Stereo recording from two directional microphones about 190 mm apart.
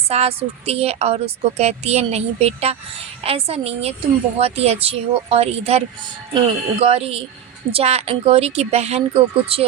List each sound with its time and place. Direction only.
0.1 s speech: 35° right (ahead or behind)